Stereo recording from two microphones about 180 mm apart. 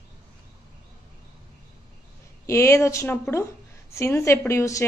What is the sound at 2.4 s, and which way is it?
A woman's voice, 15° left (ahead or behind).